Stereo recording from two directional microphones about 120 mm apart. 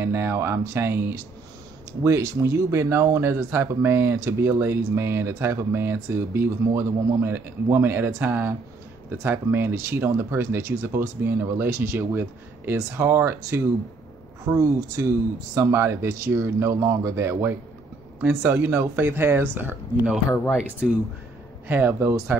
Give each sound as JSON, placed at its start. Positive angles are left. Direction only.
{"t": 0.0, "sound": "speech", "side_deg": -20}
{"t": 21.6, "sound": "speech", "side_deg": -15}